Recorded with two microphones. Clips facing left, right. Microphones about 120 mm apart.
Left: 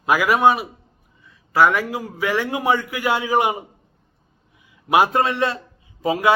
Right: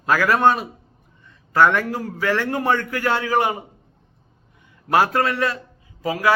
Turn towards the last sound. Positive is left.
turn(degrees=25)  # may be behind; listen again after turning